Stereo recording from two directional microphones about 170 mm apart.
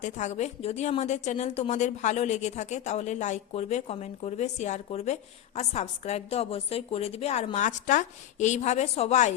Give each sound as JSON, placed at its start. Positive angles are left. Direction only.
{"t": 0.0, "sound": "speech", "side_deg": 45}